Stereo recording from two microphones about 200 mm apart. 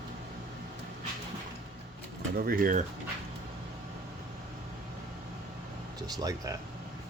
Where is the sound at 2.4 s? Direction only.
45° right (ahead or behind).